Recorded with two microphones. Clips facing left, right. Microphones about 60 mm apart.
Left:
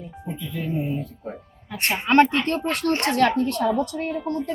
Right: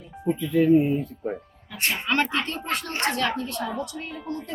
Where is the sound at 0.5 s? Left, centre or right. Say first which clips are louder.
Right 10 dB; right.